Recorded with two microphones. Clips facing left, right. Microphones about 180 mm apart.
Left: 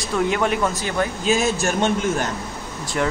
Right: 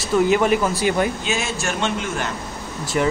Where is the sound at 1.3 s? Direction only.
40° left (ahead or behind).